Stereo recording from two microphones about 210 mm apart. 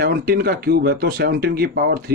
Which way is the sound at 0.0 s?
45° right (ahead or behind).